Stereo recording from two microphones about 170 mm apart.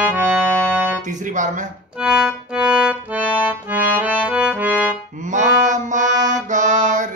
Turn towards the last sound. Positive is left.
turn(degrees=-45)  # may be behind; listen again after turning